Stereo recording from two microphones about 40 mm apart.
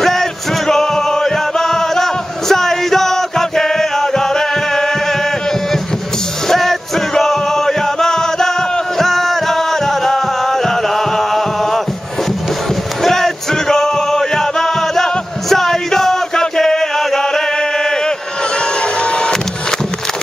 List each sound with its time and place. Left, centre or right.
0.0 s music: centre
6.5 s music: centre
13.0 s music: centre
15.5 s chant: centre
18.6 s printer: left